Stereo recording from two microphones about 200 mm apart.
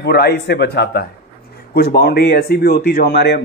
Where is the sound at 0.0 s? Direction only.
55° left (ahead or behind).